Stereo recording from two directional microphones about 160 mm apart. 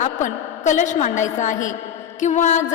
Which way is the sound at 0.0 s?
50° left (ahead or behind).